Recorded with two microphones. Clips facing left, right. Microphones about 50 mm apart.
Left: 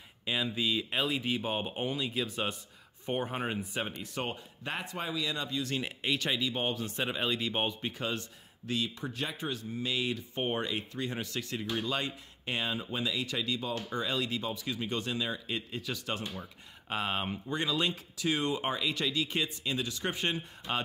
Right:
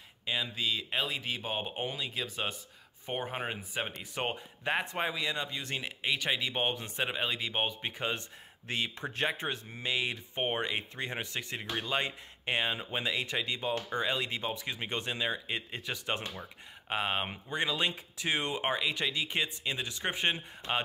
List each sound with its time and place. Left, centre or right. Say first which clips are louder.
0.2 s speech: left 2 dB; centre
3.8 s speech: right 1 dB; centre
5.8 s speech: left 1 dB; centre
6.3 s speech: even; right
7.0 s speech: left 1 dB; centre
7.8 s speech: even; right
16.9 s speech: right 1 dB; centre